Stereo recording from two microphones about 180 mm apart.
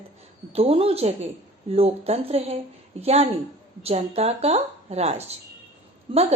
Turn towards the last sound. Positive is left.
turn(degrees=-35)  # may be behind; listen again after turning